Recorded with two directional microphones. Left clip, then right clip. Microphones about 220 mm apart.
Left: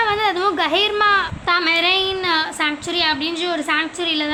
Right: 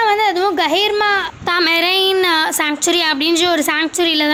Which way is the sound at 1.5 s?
35° right (ahead or behind).